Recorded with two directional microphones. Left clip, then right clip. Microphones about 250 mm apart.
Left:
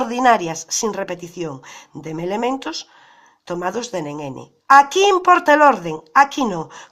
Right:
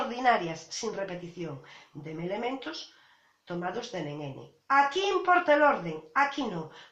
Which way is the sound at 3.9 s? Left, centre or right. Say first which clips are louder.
Left 11 dB; left.